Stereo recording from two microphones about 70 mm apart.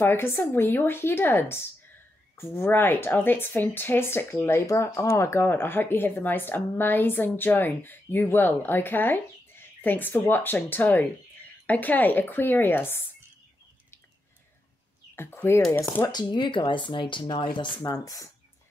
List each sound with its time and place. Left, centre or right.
0.0 s speech: left
15.1 s speech: left
16.1 s speech: left
17.8 s speech: left